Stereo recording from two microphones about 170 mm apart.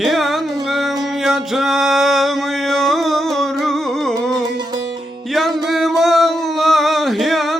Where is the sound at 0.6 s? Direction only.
Centre (ahead or behind).